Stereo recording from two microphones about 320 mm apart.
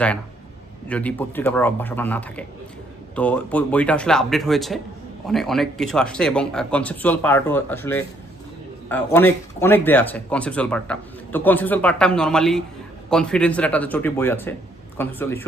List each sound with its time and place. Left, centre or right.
0.9 s a man's voice: centre